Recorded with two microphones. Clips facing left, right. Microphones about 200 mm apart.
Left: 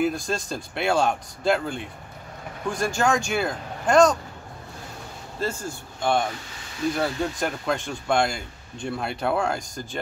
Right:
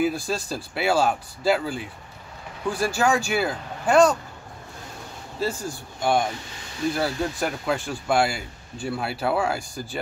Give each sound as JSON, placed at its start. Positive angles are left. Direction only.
{"t": 0.0, "sound": "speech", "side_deg": -5}
{"t": 5.4, "sound": "speech", "side_deg": -10}